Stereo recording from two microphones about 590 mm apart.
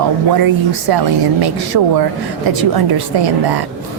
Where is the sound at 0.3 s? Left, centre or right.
Right.